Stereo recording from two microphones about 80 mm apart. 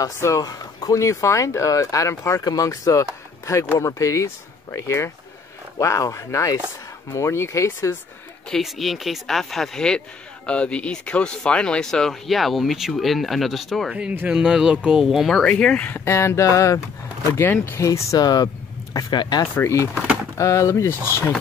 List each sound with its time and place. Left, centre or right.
0.4 s speech: left
8.5 s speech: centre
14.1 s speech: right
14.4 s speech: centre
16.1 s speech: left
17.3 s speech: left
17.8 s speech: left
19.4 s speech: left